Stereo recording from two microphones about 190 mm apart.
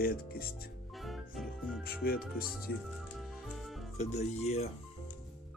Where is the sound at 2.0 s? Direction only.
50° left (ahead or behind).